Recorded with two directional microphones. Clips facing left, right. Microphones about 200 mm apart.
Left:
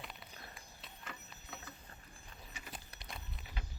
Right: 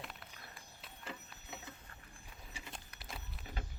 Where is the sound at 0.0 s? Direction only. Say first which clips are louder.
Right 1 dB; centre (ahead or behind).